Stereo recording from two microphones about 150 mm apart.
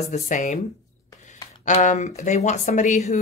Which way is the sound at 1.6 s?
55° left (ahead or behind).